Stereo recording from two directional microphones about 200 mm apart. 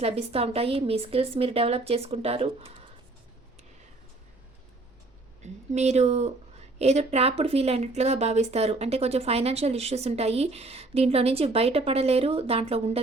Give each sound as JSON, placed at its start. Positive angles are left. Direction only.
{"t": 0.0, "sound": "a woman's voice", "side_deg": -30}
{"t": 5.4, "sound": "a woman's voice", "side_deg": -35}